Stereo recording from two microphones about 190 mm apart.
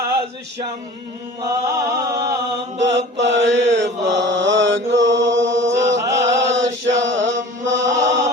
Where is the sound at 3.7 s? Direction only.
70° right (ahead or behind).